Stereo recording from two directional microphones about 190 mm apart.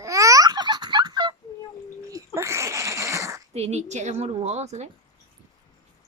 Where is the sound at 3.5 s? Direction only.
35° right (ahead or behind).